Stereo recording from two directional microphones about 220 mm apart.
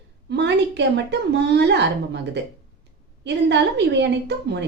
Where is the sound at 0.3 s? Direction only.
50° right (ahead or behind).